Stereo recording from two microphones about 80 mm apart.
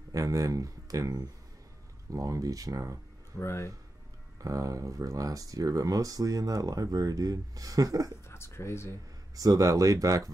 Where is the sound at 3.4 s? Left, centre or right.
Left.